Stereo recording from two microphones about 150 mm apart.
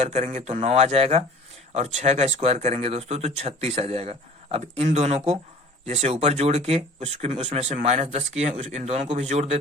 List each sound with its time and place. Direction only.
0.0 s speech: 50° right (ahead or behind)